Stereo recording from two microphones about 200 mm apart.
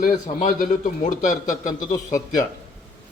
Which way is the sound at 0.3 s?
40° left (ahead or behind).